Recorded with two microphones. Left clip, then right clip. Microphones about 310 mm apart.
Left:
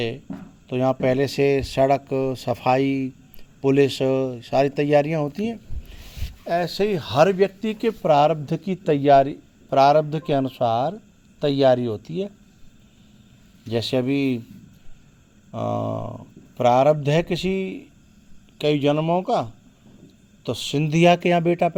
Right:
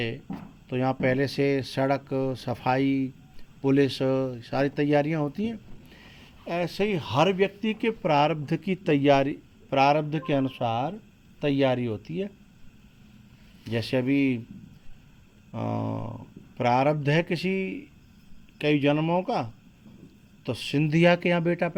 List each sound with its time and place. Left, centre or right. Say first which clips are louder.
0.7 s speech: left 5 dB; left
13.7 s speech: left 4 dB; left
15.5 s speech: left 6 dB; left